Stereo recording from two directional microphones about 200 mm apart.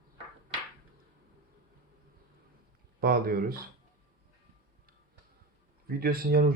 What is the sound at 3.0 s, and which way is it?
Speech, 45° right (ahead or behind).